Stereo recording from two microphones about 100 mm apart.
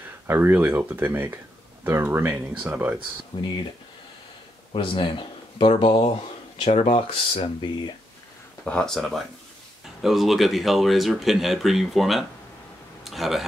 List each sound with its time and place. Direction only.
0.3 s speech: 20° right (ahead or behind)
3.3 s speech: 50° left (ahead or behind)
4.7 s speech: 55° left (ahead or behind)
7.6 s speech: 50° left (ahead or behind)
8.6 s speech: 10° left (ahead or behind)
13.0 s a sound: centre (ahead or behind)